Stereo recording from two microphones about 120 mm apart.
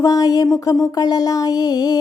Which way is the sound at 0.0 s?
30° left (ahead or behind).